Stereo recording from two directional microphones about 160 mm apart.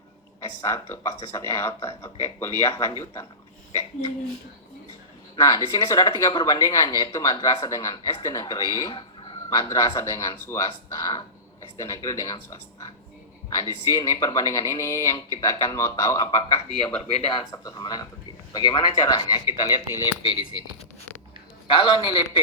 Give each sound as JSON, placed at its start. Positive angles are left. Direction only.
{"t": 0.6, "sound": "speech", "side_deg": 15}
{"t": 5.4, "sound": "speech", "side_deg": 20}
{"t": 9.0, "sound": "a sound", "side_deg": 30}
{"t": 9.6, "sound": "speech", "side_deg": 20}
{"t": 13.6, "sound": "speech", "side_deg": 15}
{"t": 17.1, "sound": "a man's voice", "side_deg": 40}
{"t": 17.5, "sound": "speech", "side_deg": 25}
{"t": 21.7, "sound": "a man's voice", "side_deg": 30}